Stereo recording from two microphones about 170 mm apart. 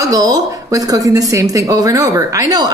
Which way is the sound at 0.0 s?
20° right (ahead or behind).